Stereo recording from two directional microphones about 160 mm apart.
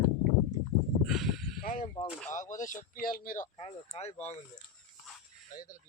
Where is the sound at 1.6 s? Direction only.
55° left (ahead or behind).